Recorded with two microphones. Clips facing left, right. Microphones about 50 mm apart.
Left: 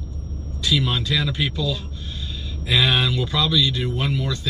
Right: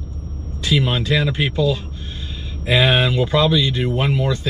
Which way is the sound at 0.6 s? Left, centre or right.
Right.